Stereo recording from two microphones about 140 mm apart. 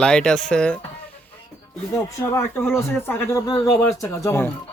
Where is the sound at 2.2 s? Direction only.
15° left (ahead or behind).